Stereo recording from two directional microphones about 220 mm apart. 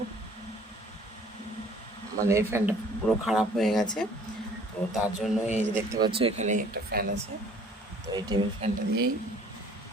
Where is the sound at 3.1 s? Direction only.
Centre (ahead or behind).